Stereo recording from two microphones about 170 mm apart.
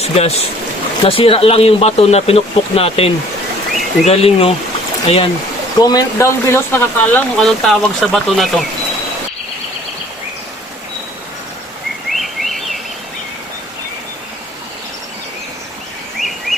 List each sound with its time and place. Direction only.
0.0 s speech: 35° left (ahead or behind)
5.8 s speech: 20° left (ahead or behind); by 8.6 s centre (ahead or behind)
12.1 s bird: centre (ahead or behind)
16.1 s a sound: centre (ahead or behind)